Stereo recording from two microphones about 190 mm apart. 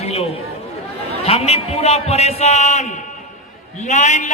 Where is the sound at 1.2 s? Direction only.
30° left (ahead or behind).